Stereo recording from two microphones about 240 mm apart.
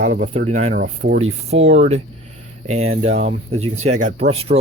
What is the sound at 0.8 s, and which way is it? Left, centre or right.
Speech, right.